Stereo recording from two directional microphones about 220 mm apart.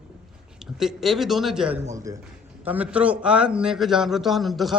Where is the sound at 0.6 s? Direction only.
Centre (ahead or behind).